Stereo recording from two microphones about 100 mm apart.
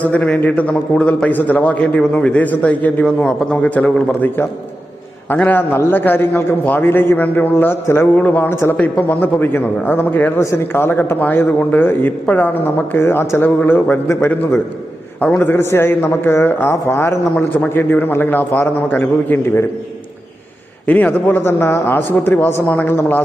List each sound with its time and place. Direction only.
0.1 s a man's voice: 10° left (ahead or behind); by 17.2 s 25° left (ahead or behind)
17.3 s a man's voice: 15° left (ahead or behind)
20.8 s a man's voice: 15° left (ahead or behind)